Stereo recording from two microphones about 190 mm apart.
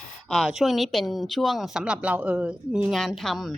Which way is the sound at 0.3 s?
Centre (ahead or behind).